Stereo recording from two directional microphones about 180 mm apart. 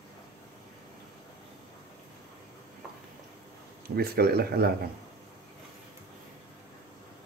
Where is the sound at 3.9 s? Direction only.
60° right (ahead or behind).